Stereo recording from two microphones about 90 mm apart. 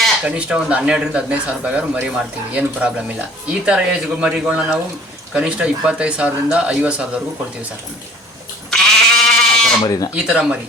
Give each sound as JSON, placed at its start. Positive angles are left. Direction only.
{"t": 0.3, "sound": "speech", "side_deg": -15}
{"t": 8.7, "sound": "goat", "side_deg": 5}
{"t": 9.8, "sound": "speech", "side_deg": 40}
{"t": 10.2, "sound": "speech", "side_deg": -10}